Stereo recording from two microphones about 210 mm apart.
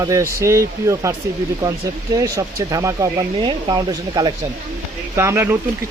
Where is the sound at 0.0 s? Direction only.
15° right (ahead or behind).